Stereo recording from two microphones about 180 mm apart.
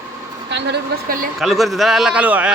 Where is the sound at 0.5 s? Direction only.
60° right (ahead or behind).